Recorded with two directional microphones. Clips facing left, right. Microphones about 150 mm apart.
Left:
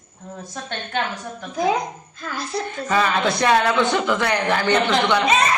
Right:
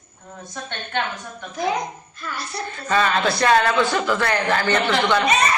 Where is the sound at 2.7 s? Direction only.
15° left (ahead or behind).